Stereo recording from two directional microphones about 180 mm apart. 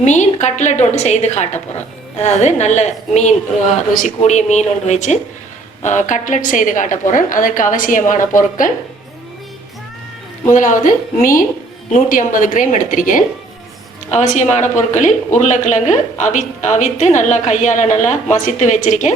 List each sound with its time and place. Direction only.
0.0 s a woman's voice: 40° left (ahead or behind)
10.5 s a woman's voice: 45° left (ahead or behind)